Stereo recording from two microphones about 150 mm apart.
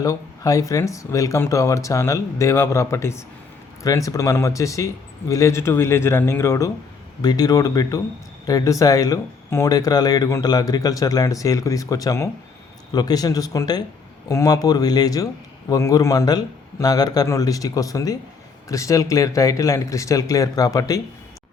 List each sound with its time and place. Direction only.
0.0 s a man's voice: 20° left (ahead or behind)